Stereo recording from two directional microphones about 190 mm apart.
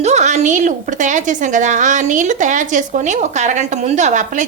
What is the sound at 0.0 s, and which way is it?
A woman's voice, 35° right (ahead or behind).